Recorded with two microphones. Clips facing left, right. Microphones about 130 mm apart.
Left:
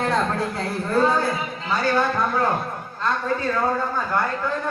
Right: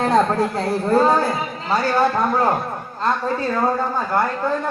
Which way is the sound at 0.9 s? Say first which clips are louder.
Right 3 dB; 40° right (ahead or behind).